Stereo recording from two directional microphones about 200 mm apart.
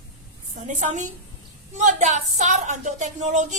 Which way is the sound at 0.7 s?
35° right (ahead or behind).